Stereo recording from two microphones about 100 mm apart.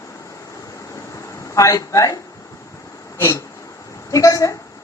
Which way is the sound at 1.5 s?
30° left (ahead or behind).